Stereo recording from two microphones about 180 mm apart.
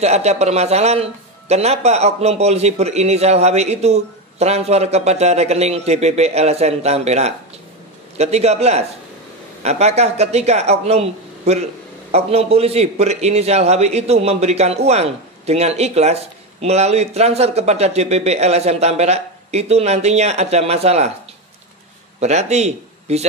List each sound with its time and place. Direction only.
0.0 s a man's voice: 35° right (ahead or behind)
22.2 s a man's voice: 40° right (ahead or behind)